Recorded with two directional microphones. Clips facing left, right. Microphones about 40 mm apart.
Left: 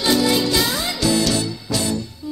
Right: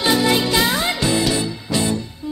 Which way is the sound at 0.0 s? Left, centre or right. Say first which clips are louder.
Right 1 dB; right.